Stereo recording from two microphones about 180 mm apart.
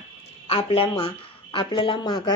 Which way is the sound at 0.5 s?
30° left (ahead or behind).